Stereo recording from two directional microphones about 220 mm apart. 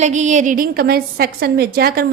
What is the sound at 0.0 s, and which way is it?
A woman's voice, 30° right (ahead or behind).